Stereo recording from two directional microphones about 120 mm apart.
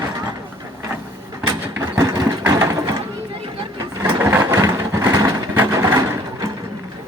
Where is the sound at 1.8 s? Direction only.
30° right (ahead or behind).